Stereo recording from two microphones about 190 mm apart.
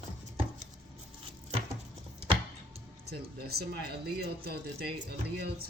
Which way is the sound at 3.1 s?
55° right (ahead or behind).